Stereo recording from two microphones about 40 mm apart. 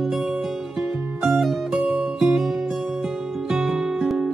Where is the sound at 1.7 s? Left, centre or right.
Right.